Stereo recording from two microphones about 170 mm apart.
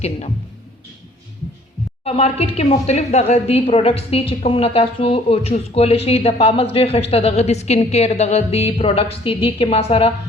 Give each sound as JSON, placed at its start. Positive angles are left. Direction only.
{"t": 2.0, "sound": "a woman's voice", "side_deg": 35}